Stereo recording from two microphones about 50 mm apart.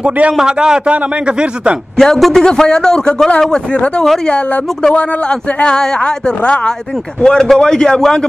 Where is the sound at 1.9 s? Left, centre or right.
Centre; by 6.7 s left.